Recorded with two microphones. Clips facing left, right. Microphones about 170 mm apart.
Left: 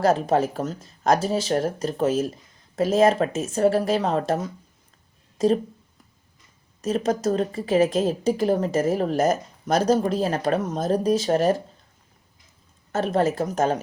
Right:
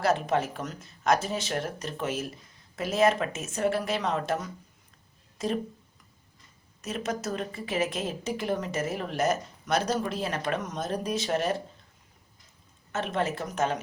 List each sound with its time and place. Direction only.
0.0 s a woman's voice: 35° left (ahead or behind)
6.8 s a woman's voice: 35° left (ahead or behind)
12.9 s a woman's voice: 40° left (ahead or behind)